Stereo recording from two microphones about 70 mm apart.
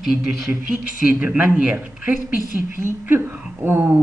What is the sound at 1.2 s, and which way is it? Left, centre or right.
Speech, centre.